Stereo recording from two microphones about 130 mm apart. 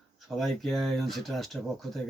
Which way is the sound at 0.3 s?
Centre (ahead or behind).